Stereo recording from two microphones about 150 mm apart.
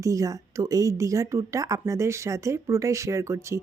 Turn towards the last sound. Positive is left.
turn(degrees=-20)  # may be behind; listen again after turning